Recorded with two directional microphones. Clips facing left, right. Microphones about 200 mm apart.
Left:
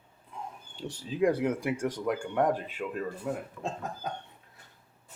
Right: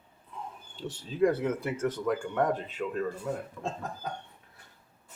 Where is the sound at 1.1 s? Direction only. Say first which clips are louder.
Even; 15° left (ahead or behind).